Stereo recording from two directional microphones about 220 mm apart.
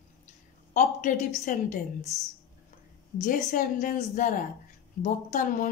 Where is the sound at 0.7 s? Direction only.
35° left (ahead or behind).